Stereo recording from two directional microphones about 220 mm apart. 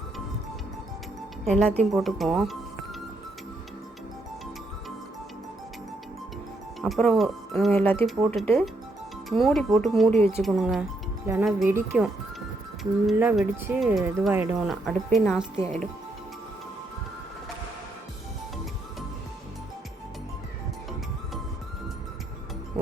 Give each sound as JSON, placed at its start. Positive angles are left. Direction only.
{"t": 1.5, "sound": "speech", "side_deg": 0}
{"t": 6.8, "sound": "speech", "side_deg": 0}
{"t": 8.0, "sound": "speech", "side_deg": 0}
{"t": 10.1, "sound": "speech", "side_deg": -25}
{"t": 10.4, "sound": "speech", "side_deg": 0}